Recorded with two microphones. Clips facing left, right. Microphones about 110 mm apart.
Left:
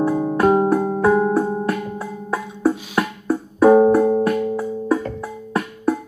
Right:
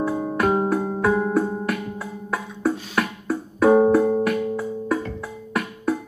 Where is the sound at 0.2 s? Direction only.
25° left (ahead or behind).